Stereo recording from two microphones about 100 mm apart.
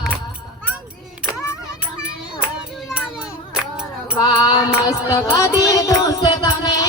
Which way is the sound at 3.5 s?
10° right (ahead or behind).